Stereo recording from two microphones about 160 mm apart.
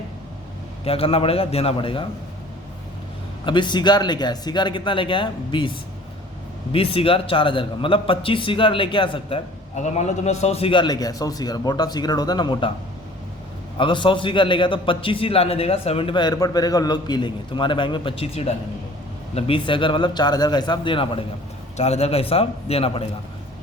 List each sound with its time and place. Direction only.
0.9 s a man's voice: 35° left (ahead or behind)
3.4 s a man's voice: 30° left (ahead or behind)
6.7 s a man's voice: 35° left (ahead or behind)
9.7 s a man's voice: 45° left (ahead or behind); by 12.7 s 30° left (ahead or behind)
13.7 s a man's voice: 30° left (ahead or behind)